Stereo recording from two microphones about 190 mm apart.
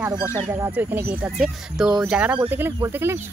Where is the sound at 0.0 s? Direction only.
10° right (ahead or behind).